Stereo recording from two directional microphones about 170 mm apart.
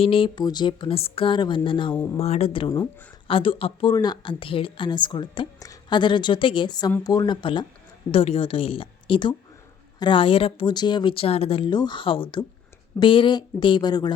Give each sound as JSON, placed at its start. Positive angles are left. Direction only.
{"t": 0.0, "sound": "speech", "side_deg": 30}
{"t": 2.1, "sound": "speech", "side_deg": 40}